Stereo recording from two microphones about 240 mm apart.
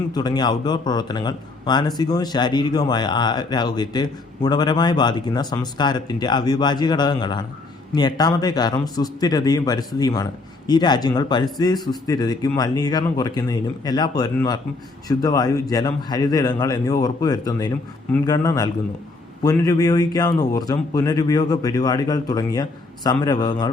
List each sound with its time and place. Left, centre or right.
0.1 s speech: centre